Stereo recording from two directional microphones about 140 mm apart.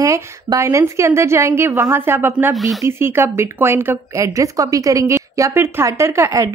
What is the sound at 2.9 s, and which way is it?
A woman's voice, 15° right (ahead or behind).